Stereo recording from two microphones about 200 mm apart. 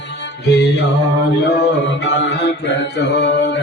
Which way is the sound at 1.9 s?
65° left (ahead or behind).